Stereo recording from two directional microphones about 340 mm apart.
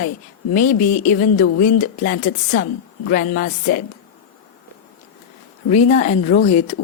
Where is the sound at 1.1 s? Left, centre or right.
Left.